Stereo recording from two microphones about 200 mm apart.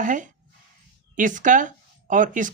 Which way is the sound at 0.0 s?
40° right (ahead or behind).